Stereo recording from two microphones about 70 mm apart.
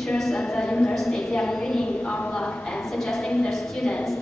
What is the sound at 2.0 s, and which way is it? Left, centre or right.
A woman's voice, centre.